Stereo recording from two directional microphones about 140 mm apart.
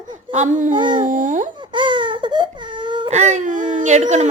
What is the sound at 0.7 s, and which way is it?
Dog, 35° right (ahead or behind).